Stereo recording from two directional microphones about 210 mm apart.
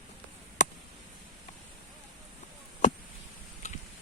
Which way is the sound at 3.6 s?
35° left (ahead or behind).